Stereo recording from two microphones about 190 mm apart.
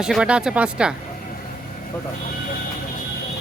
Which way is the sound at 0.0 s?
5° right (ahead or behind).